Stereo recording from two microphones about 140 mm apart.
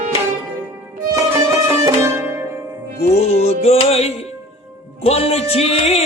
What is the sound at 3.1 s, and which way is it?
Music, 45° left (ahead or behind).